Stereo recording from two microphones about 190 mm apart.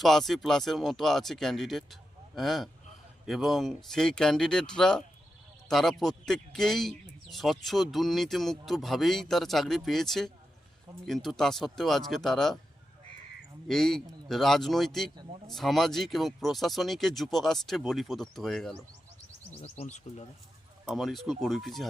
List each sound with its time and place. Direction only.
0.0 s speech: centre (ahead or behind)
13.7 s speech: centre (ahead or behind)
19.6 s speech: 35° left (ahead or behind)
20.8 s speech: centre (ahead or behind)